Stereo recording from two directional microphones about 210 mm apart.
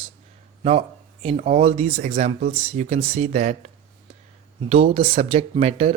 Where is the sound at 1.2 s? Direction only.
30° right (ahead or behind).